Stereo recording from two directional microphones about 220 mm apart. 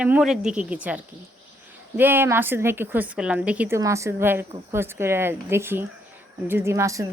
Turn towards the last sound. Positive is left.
turn(degrees=-15)  # may be behind; listen again after turning